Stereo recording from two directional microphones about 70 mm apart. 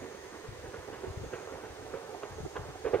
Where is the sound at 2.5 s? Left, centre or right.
Left.